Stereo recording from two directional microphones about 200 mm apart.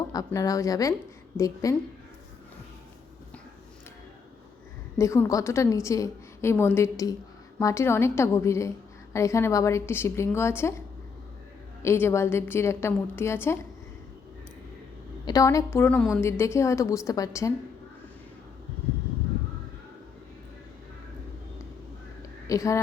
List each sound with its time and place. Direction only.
0.1 s a woman's voice: 15° left (ahead or behind)
4.9 s a woman's voice: 15° left (ahead or behind)
15.2 s a woman's voice: 15° left (ahead or behind)
22.4 s speech: 15° left (ahead or behind)